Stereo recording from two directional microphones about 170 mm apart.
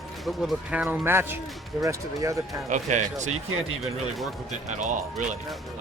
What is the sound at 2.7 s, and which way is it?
Speech, 45° right (ahead or behind).